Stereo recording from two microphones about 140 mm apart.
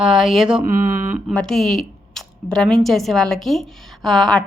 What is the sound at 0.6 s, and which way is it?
Speech, 20° right (ahead or behind).